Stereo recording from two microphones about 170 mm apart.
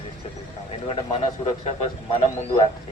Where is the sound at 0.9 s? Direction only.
35° left (ahead or behind).